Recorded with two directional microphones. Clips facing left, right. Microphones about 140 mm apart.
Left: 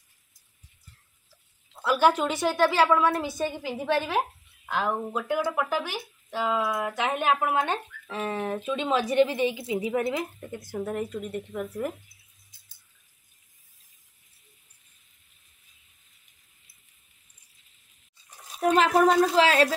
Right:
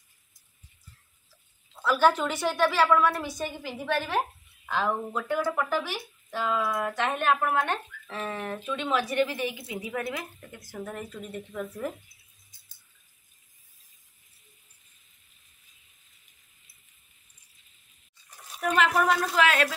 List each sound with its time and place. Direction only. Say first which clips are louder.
1.7 s speech: left 1 dB; 20° left (ahead or behind)
4.6 s speech: even; 5° left (ahead or behind); by 11.0 s 20° left (ahead or behind)
11.0 s speech: left 6 dB; 10° left (ahead or behind)
18.6 s speech: left 4 dB; 30° left (ahead or behind)